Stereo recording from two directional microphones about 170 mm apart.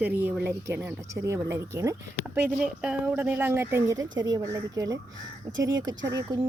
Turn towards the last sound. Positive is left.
turn(degrees=-20)  # may be behind; listen again after turning